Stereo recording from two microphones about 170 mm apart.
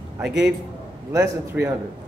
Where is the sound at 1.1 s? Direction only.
15° right (ahead or behind).